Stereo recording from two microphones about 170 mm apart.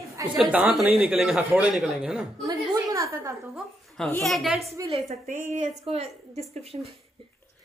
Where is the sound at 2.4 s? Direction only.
25° right (ahead or behind).